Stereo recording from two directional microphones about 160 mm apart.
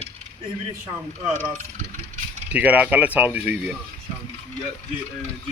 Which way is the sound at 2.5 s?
10° right (ahead or behind).